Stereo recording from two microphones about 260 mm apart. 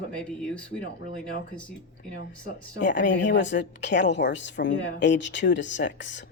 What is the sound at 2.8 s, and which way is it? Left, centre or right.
A woman's voice, left.